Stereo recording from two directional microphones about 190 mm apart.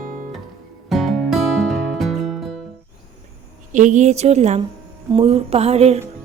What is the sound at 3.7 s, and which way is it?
Music, 40° right (ahead or behind).